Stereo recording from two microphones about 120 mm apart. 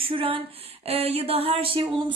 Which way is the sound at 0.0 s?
50° right (ahead or behind).